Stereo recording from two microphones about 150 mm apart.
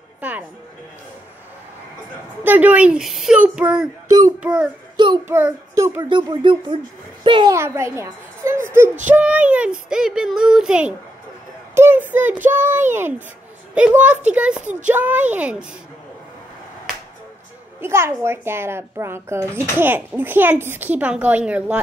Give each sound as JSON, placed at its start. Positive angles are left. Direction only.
{"t": 0.2, "sound": "music", "side_deg": -10}
{"t": 2.4, "sound": "speech", "side_deg": -10}
{"t": 4.9, "sound": "a child's voice", "side_deg": -30}
{"t": 5.3, "sound": "speech", "side_deg": -15}
{"t": 6.0, "sound": "speech", "side_deg": -35}
{"t": 7.5, "sound": "a child's voice", "side_deg": -15}
{"t": 11.7, "sound": "child singing", "side_deg": -15}
{"t": 13.7, "sound": "speech", "side_deg": -10}
{"t": 14.6, "sound": "speech", "side_deg": -55}
{"t": 14.9, "sound": "speech", "side_deg": -10}
{"t": 17.7, "sound": "speech", "side_deg": -15}